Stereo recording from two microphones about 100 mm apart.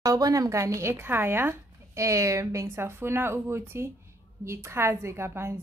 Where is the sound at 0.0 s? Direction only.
35° right (ahead or behind).